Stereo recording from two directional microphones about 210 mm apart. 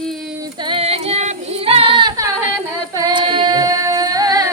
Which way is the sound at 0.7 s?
30° right (ahead or behind).